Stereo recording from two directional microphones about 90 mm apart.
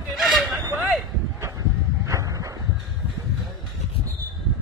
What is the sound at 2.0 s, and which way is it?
Dog, 35° right (ahead or behind).